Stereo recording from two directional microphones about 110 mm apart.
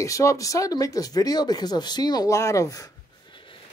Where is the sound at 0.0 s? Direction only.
30° left (ahead or behind).